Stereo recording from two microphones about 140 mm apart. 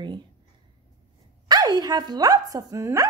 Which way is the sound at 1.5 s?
30° right (ahead or behind).